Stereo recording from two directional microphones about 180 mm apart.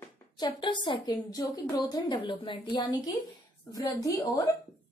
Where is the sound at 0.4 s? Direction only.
25° left (ahead or behind).